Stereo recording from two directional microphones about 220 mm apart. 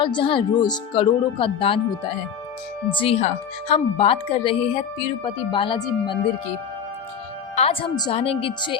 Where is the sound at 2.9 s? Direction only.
25° left (ahead or behind).